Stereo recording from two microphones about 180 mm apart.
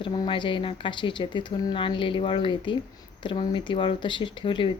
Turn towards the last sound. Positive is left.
turn(degrees=25)  # may be behind; listen again after turning